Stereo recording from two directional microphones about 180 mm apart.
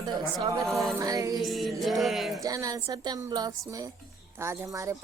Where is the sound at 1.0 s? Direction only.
20° right (ahead or behind).